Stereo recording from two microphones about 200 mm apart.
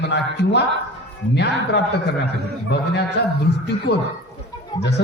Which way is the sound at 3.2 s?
55° left (ahead or behind).